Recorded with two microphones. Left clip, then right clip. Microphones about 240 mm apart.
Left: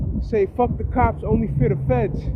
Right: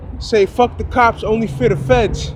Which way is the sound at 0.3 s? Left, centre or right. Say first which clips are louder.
Right 7 dB; centre.